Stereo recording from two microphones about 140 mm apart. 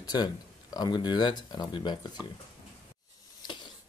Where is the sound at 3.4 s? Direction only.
30° left (ahead or behind).